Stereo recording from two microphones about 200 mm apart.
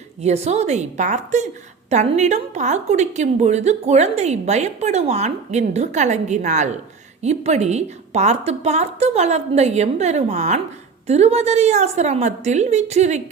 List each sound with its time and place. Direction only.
0.2 s a woman's voice: 35° right (ahead or behind)